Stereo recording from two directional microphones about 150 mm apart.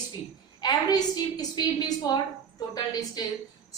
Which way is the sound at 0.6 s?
25° left (ahead or behind).